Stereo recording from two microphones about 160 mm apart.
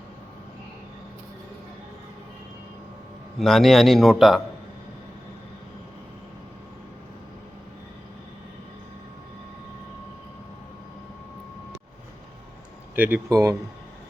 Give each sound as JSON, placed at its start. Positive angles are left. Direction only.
{"t": 3.3, "sound": "a man's voice", "side_deg": 0}
{"t": 13.0, "sound": "speech", "side_deg": -10}
{"t": 13.3, "sound": "speech", "side_deg": -20}